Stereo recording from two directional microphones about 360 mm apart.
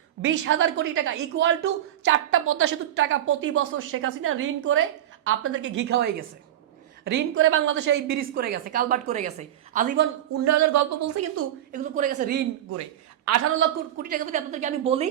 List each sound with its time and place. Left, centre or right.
0.2 s a woman's voice: right
10.4 s speech: right
11.7 s a woman's voice: right
13.2 s a woman's voice: right
13.6 s a woman's voice: right